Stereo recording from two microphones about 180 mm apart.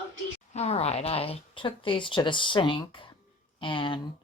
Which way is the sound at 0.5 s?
35° left (ahead or behind).